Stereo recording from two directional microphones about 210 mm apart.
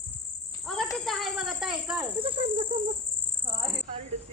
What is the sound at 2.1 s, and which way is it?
Insect, 25° right (ahead or behind).